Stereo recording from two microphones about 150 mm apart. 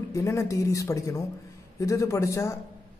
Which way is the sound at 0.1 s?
20° left (ahead or behind).